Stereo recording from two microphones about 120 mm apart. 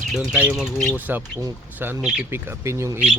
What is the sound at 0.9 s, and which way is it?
Speech, 15° right (ahead or behind).